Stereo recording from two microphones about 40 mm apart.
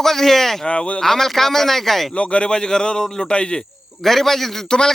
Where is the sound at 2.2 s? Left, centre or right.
Left.